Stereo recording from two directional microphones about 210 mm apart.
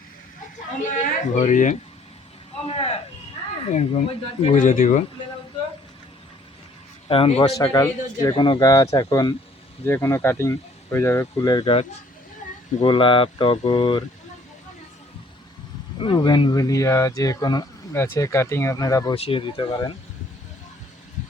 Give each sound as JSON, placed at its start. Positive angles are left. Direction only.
{"t": 0.8, "sound": "speech", "side_deg": 35}
{"t": 2.6, "sound": "a sound", "side_deg": 25}
{"t": 3.7, "sound": "speech", "side_deg": 35}
{"t": 7.1, "sound": "speech", "side_deg": 25}
{"t": 16.0, "sound": "speech", "side_deg": 20}
{"t": 19.1, "sound": "speech", "side_deg": 25}